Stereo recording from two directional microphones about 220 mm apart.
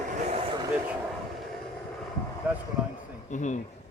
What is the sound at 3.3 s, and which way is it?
Speech, 35° left (ahead or behind).